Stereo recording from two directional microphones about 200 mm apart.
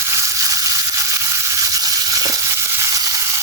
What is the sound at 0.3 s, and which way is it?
Frying, 15° right (ahead or behind).